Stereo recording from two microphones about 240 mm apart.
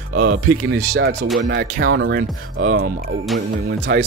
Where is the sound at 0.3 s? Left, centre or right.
Right.